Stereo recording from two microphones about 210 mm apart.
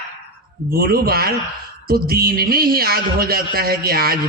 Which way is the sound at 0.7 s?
45° right (ahead or behind).